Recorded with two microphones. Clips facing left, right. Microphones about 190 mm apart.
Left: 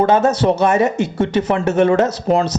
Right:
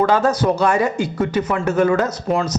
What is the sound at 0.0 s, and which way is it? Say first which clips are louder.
Speech: left 2 dB; 25° left (ahead or behind).